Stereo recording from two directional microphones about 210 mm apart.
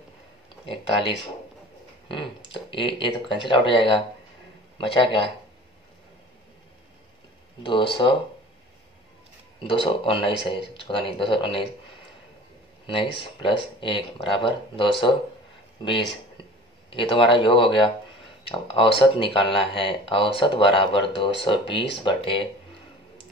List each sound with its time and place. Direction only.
2.0 s speech: 25° left (ahead or behind)
7.6 s speech: 25° left (ahead or behind)
9.6 s speech: 25° left (ahead or behind)
12.8 s speech: 25° left (ahead or behind)
16.9 s speech: 25° left (ahead or behind)